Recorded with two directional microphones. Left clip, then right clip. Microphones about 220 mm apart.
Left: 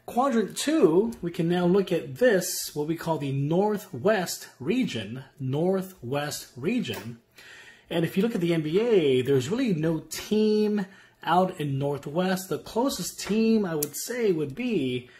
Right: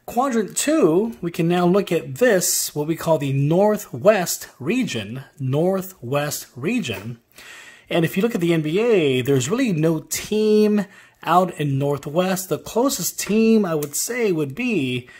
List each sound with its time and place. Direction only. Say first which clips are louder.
0.0 s speech: right 4 dB; 30° right (ahead or behind)